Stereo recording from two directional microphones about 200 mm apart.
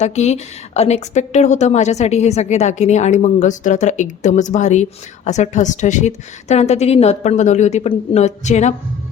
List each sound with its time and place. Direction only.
0.0 s a woman's voice: 35° left (ahead or behind)